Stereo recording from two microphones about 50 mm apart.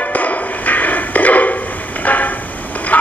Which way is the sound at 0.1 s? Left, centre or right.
Left.